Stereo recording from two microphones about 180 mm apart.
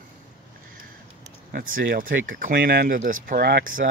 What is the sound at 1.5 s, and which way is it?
Speech, 50° right (ahead or behind).